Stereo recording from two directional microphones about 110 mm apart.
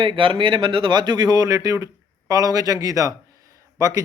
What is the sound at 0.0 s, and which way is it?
Speech, 50° right (ahead or behind).